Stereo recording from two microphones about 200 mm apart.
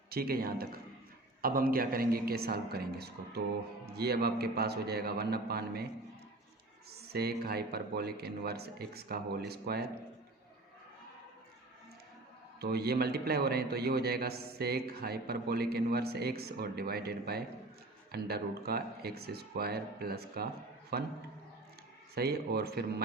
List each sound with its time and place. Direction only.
0.1 s a man's voice: 50° right (ahead or behind)
7.1 s a man's voice: 50° right (ahead or behind)
12.5 s a man's voice: 50° right (ahead or behind)
22.1 s a man's voice: 50° right (ahead or behind)